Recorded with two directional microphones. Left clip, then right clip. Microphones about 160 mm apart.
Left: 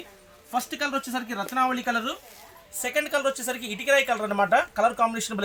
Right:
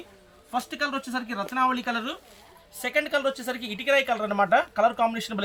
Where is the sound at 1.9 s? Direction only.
Centre (ahead or behind).